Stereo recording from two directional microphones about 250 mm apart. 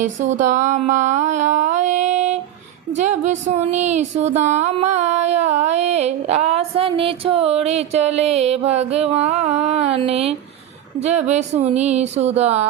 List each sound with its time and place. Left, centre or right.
0.3 s speech: right